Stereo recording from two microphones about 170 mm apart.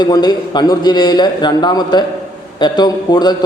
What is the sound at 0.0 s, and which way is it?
A man's voice, 25° left (ahead or behind).